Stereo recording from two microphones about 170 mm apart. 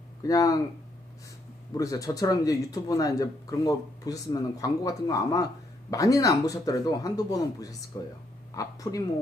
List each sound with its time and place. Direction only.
0.2 s speech: 20° left (ahead or behind)
1.7 s speech: 20° left (ahead or behind)